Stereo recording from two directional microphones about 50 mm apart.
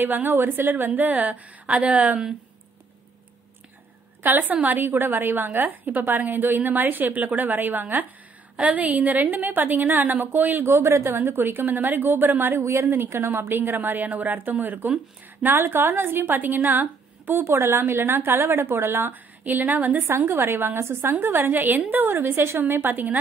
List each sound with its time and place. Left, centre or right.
0.0 s a woman's voice: right
4.2 s a woman's voice: right
10.6 s a woman's voice: right
11.1 s a woman's voice: right
12.6 s a woman's voice: right
12.9 s a woman's voice: right
15.4 s a woman's voice: right
17.3 s a woman's voice: right
19.4 s a woman's voice: right
20.2 s a woman's voice: right
21.1 s a woman's voice: right
22.1 s a woman's voice: right
22.8 s a woman's voice: right